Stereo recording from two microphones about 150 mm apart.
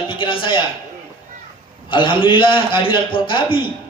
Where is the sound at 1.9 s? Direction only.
35° left (ahead or behind).